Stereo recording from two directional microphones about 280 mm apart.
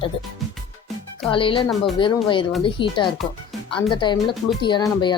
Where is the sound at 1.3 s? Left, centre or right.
Centre.